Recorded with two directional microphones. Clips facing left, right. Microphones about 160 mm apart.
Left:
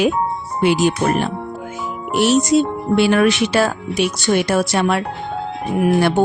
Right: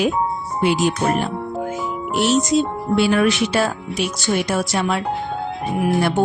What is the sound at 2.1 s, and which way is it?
Speech, 60° left (ahead or behind).